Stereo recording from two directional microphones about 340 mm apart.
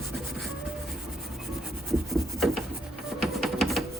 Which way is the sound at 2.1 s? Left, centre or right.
Centre.